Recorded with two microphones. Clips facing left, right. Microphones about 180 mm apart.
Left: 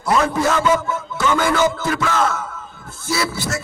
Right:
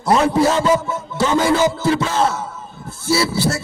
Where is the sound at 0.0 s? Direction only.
30° right (ahead or behind).